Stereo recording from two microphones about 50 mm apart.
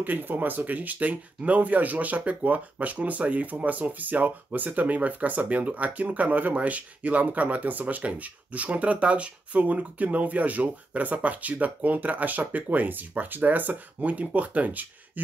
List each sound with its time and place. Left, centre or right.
0.0 s speech: right